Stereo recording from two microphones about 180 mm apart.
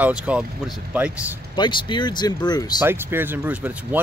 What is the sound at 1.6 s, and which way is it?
Speech, 25° left (ahead or behind).